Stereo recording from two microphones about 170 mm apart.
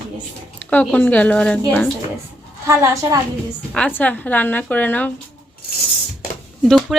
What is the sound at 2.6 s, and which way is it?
Speech, 15° right (ahead or behind).